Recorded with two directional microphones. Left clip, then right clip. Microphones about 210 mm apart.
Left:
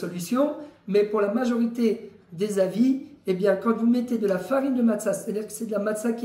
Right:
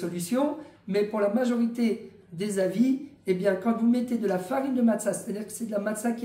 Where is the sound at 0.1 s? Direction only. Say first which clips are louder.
Left 4 dB; 20° right (ahead or behind).